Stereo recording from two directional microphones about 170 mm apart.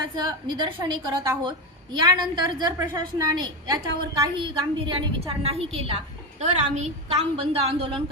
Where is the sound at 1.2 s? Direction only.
15° right (ahead or behind).